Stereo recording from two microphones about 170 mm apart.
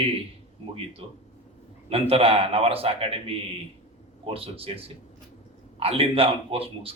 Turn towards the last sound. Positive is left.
turn(degrees=-35)  # may be behind; listen again after turning